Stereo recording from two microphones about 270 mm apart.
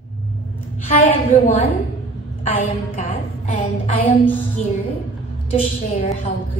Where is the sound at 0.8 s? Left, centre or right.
Left.